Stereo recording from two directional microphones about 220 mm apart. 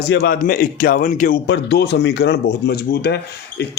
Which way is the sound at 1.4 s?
50° left (ahead or behind).